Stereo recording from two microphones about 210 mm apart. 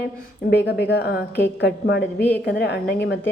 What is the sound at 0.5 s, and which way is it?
A woman's voice, 50° left (ahead or behind).